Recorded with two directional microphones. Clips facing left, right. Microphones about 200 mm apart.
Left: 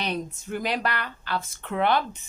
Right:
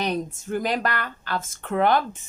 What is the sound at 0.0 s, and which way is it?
Speech, 45° right (ahead or behind).